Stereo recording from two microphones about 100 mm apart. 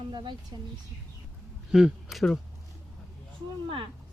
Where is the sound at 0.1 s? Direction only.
50° right (ahead or behind).